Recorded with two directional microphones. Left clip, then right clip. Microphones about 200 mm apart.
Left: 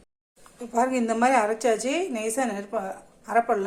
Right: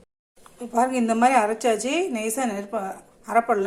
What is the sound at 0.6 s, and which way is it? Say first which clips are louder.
A woman's voice: right 2 dB; 10° right (ahead or behind).